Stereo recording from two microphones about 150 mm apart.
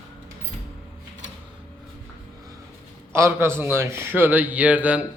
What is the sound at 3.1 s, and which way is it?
A man's voice, 15° right (ahead or behind).